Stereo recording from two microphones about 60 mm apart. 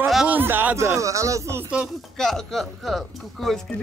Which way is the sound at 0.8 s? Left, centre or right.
Right.